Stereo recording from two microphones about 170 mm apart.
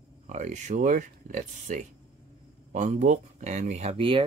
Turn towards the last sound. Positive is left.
turn(degrees=-30)  # may be behind; listen again after turning